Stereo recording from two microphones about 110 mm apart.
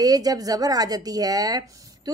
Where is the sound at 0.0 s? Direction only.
35° right (ahead or behind).